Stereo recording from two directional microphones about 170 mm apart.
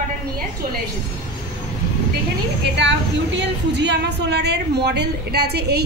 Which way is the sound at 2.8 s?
90° right.